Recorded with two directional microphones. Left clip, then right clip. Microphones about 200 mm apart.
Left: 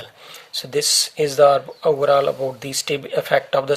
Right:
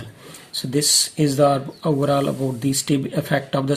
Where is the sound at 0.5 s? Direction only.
25° left (ahead or behind).